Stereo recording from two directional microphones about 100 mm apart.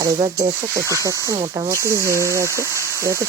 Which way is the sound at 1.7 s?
30° right (ahead or behind).